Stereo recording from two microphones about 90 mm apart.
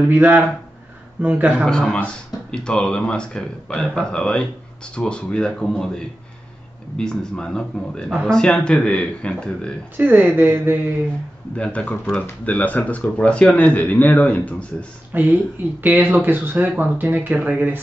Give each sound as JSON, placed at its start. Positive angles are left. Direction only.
{"t": 0.0, "sound": "speech", "side_deg": -20}
{"t": 1.7, "sound": "speech", "side_deg": 10}
{"t": 9.9, "sound": "speech", "side_deg": -20}
{"t": 11.5, "sound": "speech", "side_deg": 15}
{"t": 15.1, "sound": "speech", "side_deg": -20}